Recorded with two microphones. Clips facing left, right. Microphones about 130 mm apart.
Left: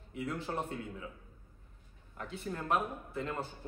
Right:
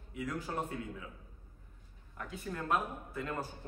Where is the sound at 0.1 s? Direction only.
30° left (ahead or behind).